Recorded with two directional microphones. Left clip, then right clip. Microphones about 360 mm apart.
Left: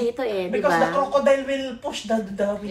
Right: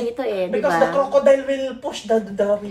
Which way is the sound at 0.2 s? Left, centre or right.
Centre.